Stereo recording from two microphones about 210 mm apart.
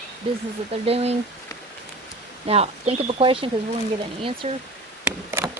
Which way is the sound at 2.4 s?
30° right (ahead or behind).